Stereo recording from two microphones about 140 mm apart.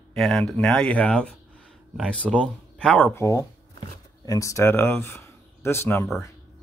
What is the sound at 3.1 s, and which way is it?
Speech, 20° left (ahead or behind).